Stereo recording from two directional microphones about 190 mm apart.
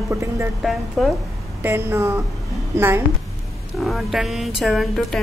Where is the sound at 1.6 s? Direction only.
15° right (ahead or behind).